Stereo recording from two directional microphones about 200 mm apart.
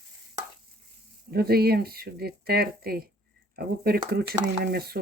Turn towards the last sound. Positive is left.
turn(degrees=-50)  # may be behind; listen again after turning